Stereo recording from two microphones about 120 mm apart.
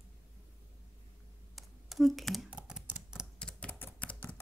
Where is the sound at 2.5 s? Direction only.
10° right (ahead or behind).